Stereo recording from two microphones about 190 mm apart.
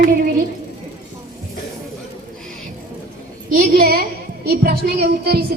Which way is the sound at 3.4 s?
50° right (ahead or behind).